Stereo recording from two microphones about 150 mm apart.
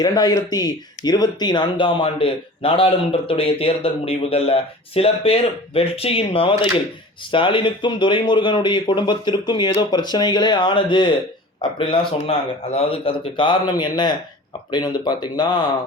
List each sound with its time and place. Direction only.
0.0 s speech: 25° left (ahead or behind)